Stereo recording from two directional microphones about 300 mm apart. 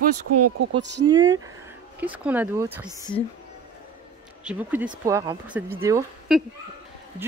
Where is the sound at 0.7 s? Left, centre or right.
Right.